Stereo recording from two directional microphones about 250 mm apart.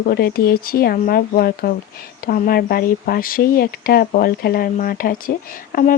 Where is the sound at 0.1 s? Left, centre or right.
Left.